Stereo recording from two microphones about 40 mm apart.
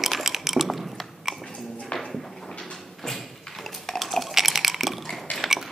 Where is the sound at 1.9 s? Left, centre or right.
Left.